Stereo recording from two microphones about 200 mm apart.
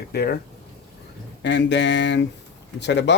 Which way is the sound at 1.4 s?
60° left (ahead or behind).